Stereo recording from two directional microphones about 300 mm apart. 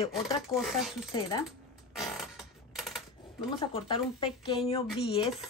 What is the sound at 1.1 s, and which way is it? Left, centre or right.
Speech, centre.